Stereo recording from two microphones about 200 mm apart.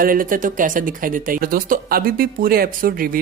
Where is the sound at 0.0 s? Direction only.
45° right (ahead or behind).